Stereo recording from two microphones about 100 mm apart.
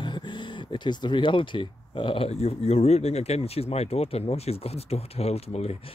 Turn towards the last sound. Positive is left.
turn(degrees=90)